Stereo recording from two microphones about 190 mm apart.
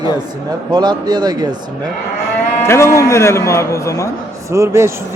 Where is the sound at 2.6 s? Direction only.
15° left (ahead or behind).